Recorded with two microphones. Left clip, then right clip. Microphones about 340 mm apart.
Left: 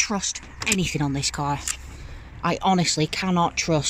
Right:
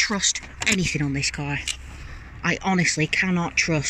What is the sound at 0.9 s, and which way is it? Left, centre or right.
Speech, left.